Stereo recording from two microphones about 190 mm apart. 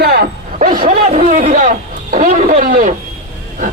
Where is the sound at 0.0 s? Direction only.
55° right (ahead or behind).